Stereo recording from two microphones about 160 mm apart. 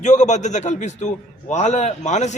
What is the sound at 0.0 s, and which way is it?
A man's voice, 45° left (ahead or behind).